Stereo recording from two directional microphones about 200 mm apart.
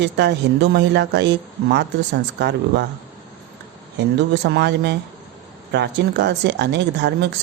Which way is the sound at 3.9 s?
55° right (ahead or behind).